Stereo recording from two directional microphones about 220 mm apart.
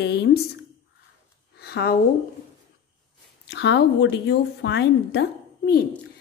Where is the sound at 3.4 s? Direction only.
50° left (ahead or behind).